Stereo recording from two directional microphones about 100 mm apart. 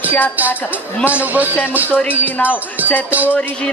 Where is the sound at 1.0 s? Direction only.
15° right (ahead or behind).